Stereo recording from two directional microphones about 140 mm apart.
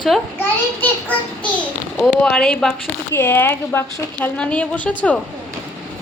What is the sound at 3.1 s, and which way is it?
A woman's voice, 15° left (ahead or behind).